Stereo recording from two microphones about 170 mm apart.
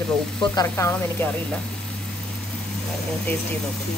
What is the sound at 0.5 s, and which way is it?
Speech, 15° left (ahead or behind).